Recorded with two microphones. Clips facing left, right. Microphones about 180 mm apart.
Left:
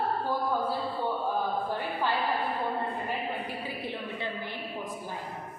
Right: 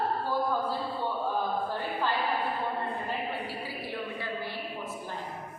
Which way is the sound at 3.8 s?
20° left (ahead or behind).